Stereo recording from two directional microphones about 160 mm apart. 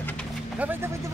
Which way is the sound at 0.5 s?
10° right (ahead or behind).